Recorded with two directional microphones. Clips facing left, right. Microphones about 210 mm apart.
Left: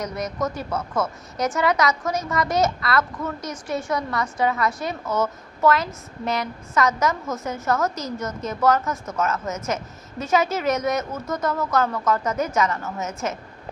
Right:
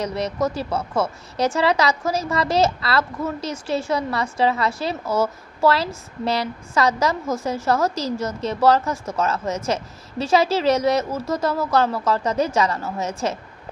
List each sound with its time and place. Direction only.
0.0 s speech: 30° right (ahead or behind)